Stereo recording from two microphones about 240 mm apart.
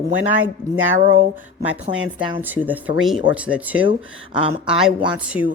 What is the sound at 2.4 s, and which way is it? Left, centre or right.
Speech, centre.